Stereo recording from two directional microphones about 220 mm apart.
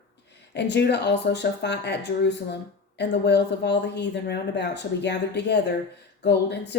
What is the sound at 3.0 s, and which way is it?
Speech, 50° left (ahead or behind).